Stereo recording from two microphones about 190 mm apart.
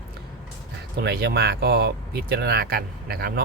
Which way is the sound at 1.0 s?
55° right (ahead or behind).